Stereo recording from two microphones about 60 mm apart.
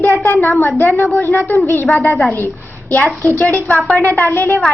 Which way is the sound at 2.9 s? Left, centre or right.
Left.